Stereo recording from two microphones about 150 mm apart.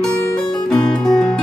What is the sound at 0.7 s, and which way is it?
Music, 5° left (ahead or behind).